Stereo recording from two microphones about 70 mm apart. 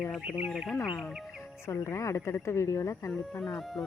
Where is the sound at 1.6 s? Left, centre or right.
Left.